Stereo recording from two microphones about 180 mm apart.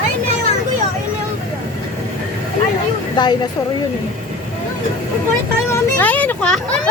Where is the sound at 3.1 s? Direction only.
25° left (ahead or behind).